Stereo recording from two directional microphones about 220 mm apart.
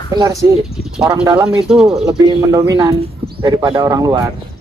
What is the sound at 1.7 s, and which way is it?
Speech, centre (ahead or behind).